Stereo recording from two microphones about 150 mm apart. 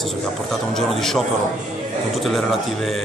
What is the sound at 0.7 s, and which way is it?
Speech, centre (ahead or behind).